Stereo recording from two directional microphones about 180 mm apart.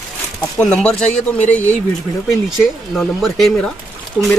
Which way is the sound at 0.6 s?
5° left (ahead or behind).